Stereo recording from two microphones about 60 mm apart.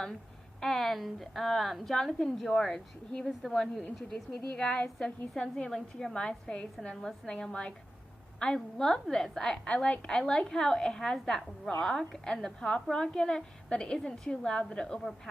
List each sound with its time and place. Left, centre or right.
0.6 s a woman's voice: centre
5.7 s a woman's voice: centre
6.1 s a woman's voice: centre